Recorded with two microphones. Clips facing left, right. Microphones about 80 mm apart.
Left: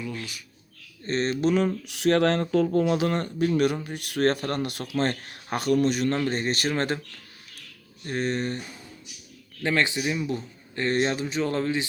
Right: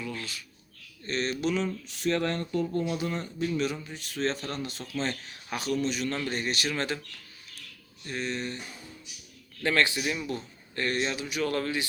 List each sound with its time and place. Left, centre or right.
0.0 s speech: centre
1.0 s speech: left
1.9 s speech: left
3.4 s speech: left
4.9 s speech: left
8.0 s speech: left
9.6 s speech: centre
10.9 s speech: left